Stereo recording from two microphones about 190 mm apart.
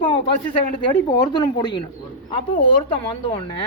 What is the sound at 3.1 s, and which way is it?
Speech, 25° left (ahead or behind).